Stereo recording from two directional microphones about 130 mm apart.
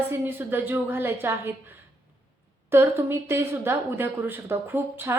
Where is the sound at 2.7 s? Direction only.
20° right (ahead or behind).